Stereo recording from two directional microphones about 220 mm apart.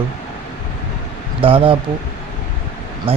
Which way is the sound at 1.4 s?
25° right (ahead or behind).